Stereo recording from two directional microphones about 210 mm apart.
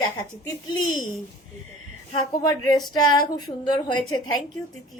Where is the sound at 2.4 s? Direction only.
15° left (ahead or behind).